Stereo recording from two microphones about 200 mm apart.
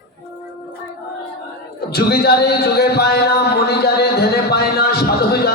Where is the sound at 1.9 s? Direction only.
50° left (ahead or behind).